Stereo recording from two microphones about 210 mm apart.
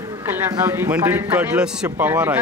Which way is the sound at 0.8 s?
10° right (ahead or behind).